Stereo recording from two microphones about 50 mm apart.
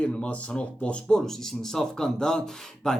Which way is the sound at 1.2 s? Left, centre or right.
Centre.